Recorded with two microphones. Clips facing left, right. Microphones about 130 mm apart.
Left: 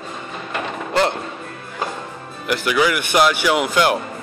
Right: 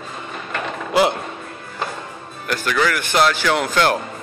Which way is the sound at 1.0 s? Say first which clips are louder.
Right 2 dB; 10° right (ahead or behind).